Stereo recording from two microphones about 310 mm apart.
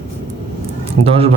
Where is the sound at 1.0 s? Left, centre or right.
Right.